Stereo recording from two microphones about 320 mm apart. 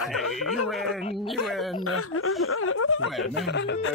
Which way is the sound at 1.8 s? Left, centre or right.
Left.